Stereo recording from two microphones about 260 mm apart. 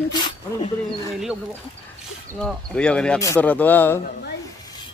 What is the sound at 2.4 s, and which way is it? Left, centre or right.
Speech, centre.